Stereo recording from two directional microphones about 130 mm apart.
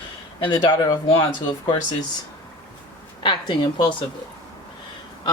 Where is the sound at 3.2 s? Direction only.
35° left (ahead or behind).